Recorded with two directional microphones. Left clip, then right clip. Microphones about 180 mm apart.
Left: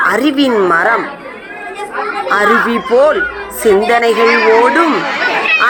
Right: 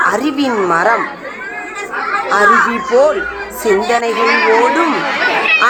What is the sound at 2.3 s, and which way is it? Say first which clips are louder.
A woman's voice: right 1 dB; 20° left (ahead or behind).